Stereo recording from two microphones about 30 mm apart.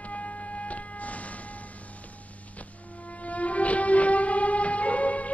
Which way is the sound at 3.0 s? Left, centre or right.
Left.